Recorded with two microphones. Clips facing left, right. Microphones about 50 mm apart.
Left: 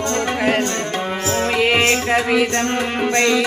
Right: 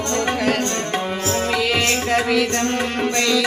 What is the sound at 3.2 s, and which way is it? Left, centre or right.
Music, left.